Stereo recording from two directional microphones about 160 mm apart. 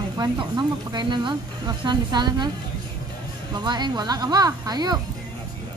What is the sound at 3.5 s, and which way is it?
Speech, 25° right (ahead or behind).